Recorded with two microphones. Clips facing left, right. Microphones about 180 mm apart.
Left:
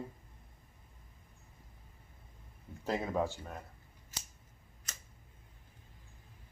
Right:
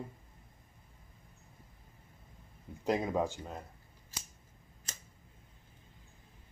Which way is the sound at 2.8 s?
15° right (ahead or behind).